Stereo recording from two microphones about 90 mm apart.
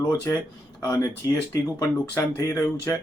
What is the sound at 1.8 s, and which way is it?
Speech, 30° left (ahead or behind).